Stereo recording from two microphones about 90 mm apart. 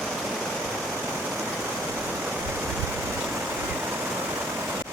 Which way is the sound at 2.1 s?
10° right (ahead or behind).